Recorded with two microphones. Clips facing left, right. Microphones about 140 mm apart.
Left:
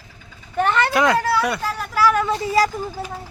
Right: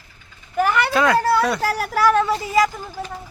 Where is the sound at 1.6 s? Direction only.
90° right.